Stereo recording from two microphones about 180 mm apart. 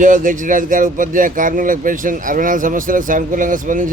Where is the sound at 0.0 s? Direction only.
45° right (ahead or behind).